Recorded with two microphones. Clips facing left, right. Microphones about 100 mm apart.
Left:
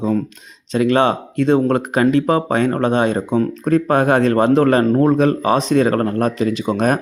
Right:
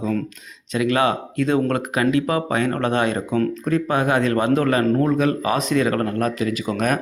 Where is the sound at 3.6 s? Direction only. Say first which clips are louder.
Left 5 dB; 40° left (ahead or behind).